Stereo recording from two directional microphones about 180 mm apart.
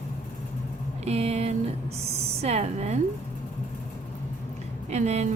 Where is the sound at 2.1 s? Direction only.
35° right (ahead or behind).